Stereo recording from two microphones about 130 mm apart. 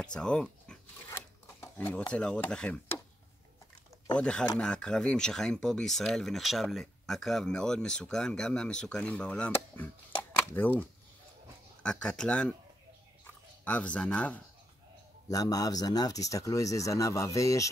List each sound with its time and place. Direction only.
0.0 s dog: 5° left (ahead or behind)
1.1 s a sound: 20° left (ahead or behind)
2.1 s speech: 10° left (ahead or behind)
4.2 s speech: 5° left (ahead or behind)
13.7 s speech: 10° left (ahead or behind)
15.2 s speech: 30° left (ahead or behind)